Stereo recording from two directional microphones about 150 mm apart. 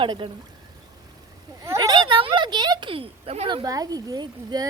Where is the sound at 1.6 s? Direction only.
25° right (ahead or behind); by 3.5 s 40° right (ahead or behind).